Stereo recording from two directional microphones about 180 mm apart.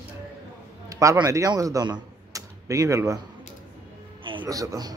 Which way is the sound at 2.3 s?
20° right (ahead or behind).